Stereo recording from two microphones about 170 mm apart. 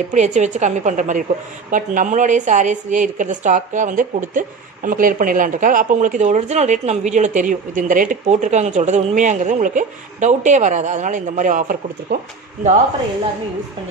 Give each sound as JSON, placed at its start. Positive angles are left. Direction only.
{"t": 0.1, "sound": "a woman's voice", "side_deg": -45}